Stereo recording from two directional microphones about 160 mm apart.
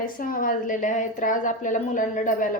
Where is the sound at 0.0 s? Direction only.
60° left (ahead or behind).